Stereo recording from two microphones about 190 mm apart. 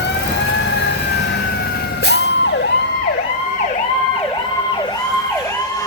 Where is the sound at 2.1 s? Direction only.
65° left (ahead or behind).